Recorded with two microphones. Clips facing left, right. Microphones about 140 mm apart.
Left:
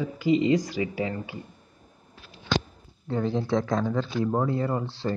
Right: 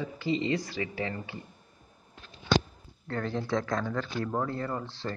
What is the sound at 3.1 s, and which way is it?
Speech, 15° left (ahead or behind).